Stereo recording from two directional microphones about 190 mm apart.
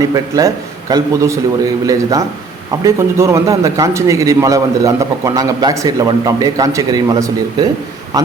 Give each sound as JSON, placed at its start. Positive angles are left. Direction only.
{"t": 0.0, "sound": "a man's voice", "side_deg": -20}